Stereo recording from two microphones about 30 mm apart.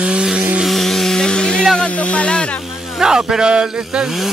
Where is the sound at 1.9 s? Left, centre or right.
Left.